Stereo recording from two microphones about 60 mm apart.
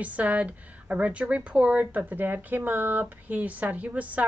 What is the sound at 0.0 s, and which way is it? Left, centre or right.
Speech, right.